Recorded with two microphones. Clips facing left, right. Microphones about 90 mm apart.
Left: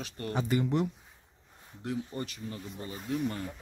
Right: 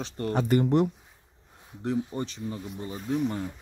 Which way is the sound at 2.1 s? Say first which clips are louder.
Right 5 dB; 25° right (ahead or behind).